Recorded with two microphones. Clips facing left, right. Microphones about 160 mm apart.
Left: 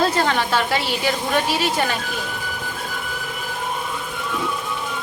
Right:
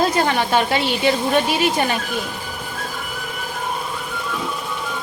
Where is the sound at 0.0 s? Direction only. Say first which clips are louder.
Right 1 dB; 15° right (ahead or behind).